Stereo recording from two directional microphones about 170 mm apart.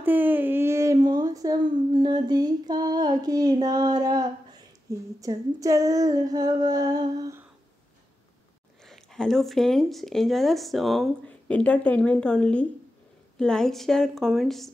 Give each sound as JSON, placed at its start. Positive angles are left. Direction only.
{"t": 0.0, "sound": "a sound", "side_deg": -10}
{"t": 4.9, "sound": "female singing", "side_deg": -20}
{"t": 8.8, "sound": "speech", "side_deg": 5}